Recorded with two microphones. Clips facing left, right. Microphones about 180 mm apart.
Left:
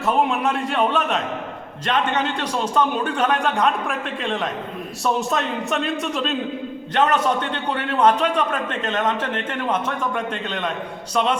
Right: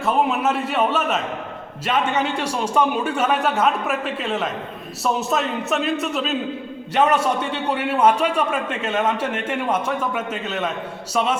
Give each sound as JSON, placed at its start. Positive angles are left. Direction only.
{"t": 0.0, "sound": "a man's voice", "side_deg": 0}